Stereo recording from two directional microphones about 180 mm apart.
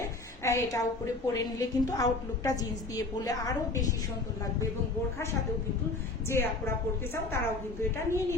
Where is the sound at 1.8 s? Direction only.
20° left (ahead or behind).